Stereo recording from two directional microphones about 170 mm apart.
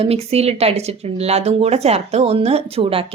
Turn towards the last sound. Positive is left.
turn(degrees=-35)  # may be behind; listen again after turning